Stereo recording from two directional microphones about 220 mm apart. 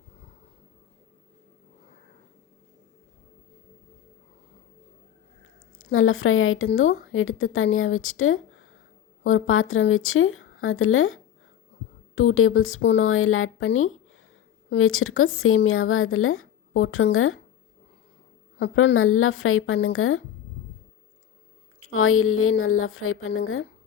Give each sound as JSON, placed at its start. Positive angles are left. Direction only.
{"t": 5.8, "sound": "a woman's voice", "side_deg": 65}
{"t": 18.6, "sound": "a woman's voice", "side_deg": 60}
{"t": 21.9, "sound": "a woman's voice", "side_deg": 70}